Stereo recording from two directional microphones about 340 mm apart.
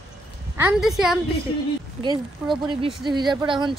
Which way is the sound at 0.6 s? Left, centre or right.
Centre.